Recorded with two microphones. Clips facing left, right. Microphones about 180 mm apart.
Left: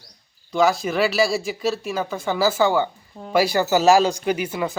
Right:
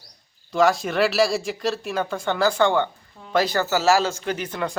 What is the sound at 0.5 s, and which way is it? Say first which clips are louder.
Speech: even; centre (ahead or behind).